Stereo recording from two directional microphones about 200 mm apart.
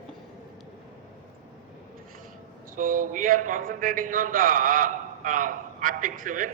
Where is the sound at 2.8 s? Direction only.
40° right (ahead or behind).